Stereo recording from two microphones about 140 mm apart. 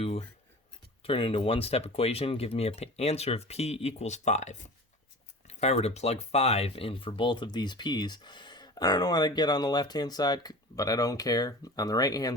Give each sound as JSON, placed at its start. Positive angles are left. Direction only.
{"t": 0.0, "sound": "speech", "side_deg": 45}